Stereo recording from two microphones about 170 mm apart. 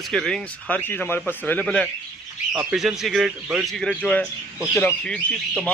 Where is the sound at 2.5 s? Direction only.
5° right (ahead or behind).